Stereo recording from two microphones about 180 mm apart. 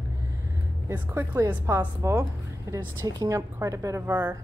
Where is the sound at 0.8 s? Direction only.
10° right (ahead or behind).